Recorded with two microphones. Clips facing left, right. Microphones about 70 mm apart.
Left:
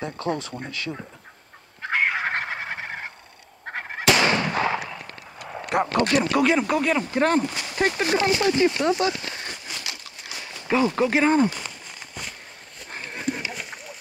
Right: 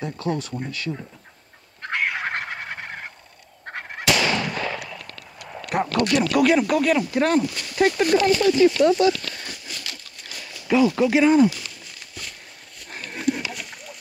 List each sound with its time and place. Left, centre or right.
0.0 s speech: left
1.8 s fowl: centre
4.5 s gunshot: left
4.8 s a sound: left
5.6 s speech: left
7.9 s speech: left
8.2 s a sound: left
10.3 s speech: left
13.1 s a sound: centre